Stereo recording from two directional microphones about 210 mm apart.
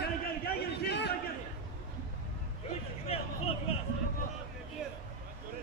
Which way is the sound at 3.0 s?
30° left (ahead or behind).